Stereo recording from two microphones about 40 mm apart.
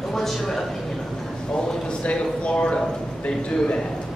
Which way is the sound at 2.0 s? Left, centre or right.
Left.